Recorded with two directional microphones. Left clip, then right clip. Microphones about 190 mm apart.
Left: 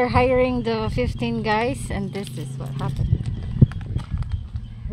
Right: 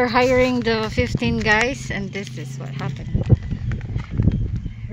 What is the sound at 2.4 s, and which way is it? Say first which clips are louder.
Speech: right 1 dB; centre (ahead or behind).